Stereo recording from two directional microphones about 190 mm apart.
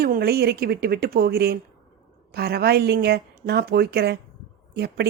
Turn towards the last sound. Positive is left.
turn(degrees=-60)  # may be behind; listen again after turning